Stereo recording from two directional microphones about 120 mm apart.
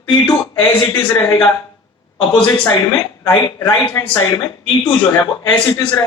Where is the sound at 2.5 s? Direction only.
30° left (ahead or behind).